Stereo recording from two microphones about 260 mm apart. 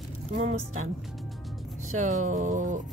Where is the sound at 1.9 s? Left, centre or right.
Right.